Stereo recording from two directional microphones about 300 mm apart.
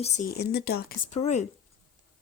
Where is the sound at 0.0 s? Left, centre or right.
Left.